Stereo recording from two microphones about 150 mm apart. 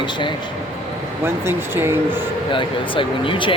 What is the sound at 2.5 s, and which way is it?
Speech, 35° left (ahead or behind).